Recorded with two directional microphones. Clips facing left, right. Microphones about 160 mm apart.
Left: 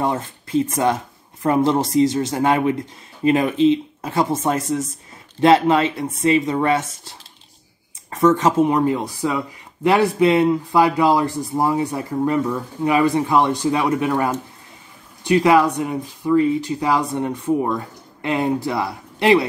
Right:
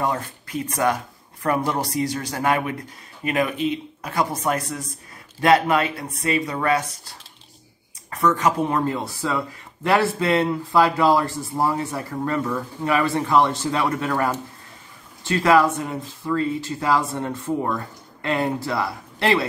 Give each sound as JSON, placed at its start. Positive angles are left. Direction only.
{"t": 0.0, "sound": "speech", "side_deg": 25}